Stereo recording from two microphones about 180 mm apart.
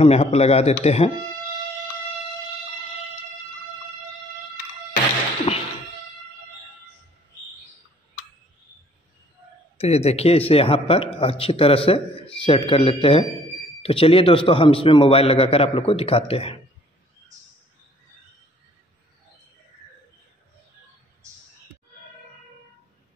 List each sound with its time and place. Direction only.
0.0 s speech: 35° left (ahead or behind)
5.5 s music: 30° left (ahead or behind)
9.8 s speech: 35° left (ahead or behind)